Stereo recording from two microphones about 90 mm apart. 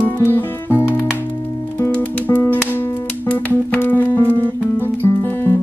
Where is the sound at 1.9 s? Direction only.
20° left (ahead or behind).